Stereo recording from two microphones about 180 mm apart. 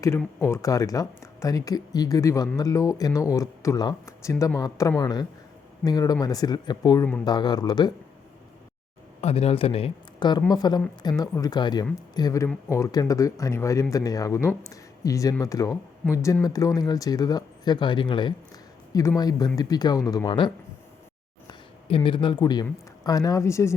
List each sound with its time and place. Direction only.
0.4 s speech: 15° left (ahead or behind)
9.2 s speech: 35° left (ahead or behind); by 23.7 s 15° left (ahead or behind)